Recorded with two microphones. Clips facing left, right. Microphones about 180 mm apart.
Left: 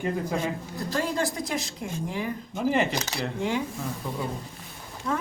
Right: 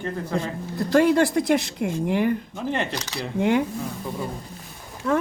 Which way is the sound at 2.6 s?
5° left (ahead or behind).